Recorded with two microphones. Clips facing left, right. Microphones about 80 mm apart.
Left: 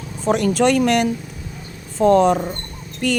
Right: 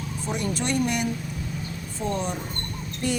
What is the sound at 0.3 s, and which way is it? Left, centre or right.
Speech, left.